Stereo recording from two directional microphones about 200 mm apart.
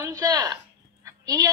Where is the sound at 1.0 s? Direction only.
15° right (ahead or behind).